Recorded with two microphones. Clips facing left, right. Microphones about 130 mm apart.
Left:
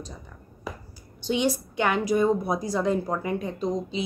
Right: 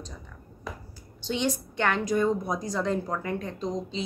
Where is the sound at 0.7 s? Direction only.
5° left (ahead or behind).